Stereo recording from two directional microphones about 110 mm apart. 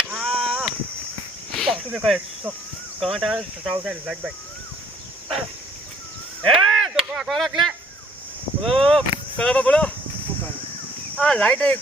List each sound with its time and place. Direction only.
0.0 s chop: centre (ahead or behind)
1.5 s snake: 5° left (ahead or behind)
1.9 s speech: 5° right (ahead or behind)
6.4 s sheep: centre (ahead or behind)
8.6 s speech: centre (ahead or behind)
11.2 s speech: 10° left (ahead or behind)